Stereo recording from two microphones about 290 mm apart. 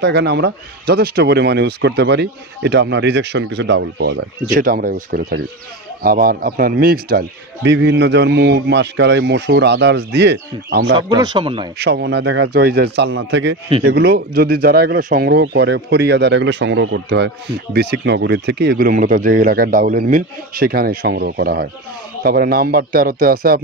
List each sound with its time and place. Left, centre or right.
0.0 s speech: right
11.0 s speech: centre
11.8 s speech: right